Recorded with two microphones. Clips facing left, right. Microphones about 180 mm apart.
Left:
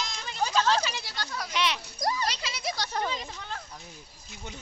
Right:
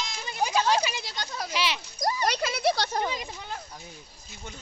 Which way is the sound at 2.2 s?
55° right (ahead or behind).